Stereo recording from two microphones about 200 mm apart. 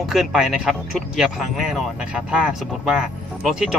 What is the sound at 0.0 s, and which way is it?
Speech, centre (ahead or behind).